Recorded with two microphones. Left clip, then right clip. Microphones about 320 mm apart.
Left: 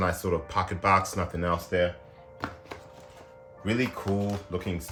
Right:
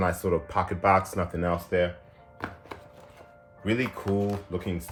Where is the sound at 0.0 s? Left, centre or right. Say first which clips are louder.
Right 1 dB; centre.